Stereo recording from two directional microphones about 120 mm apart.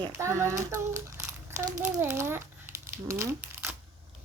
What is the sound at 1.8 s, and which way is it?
Speech, 20° right (ahead or behind).